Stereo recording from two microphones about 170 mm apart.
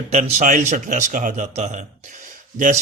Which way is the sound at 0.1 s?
40° right (ahead or behind).